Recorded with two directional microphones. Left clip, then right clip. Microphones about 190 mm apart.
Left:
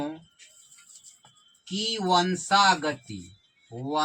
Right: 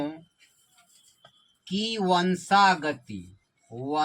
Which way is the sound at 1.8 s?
5° right (ahead or behind).